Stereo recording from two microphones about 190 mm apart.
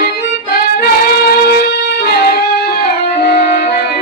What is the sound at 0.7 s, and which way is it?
Music, 55° left (ahead or behind).